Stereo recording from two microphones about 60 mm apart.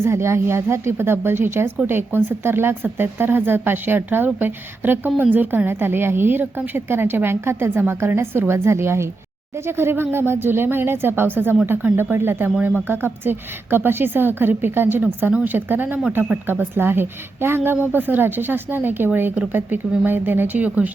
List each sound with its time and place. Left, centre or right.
0.0 s a woman's voice: right